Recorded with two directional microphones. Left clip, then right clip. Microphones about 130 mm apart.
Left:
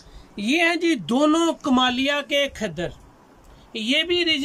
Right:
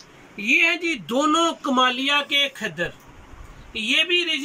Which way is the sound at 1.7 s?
35° left (ahead or behind).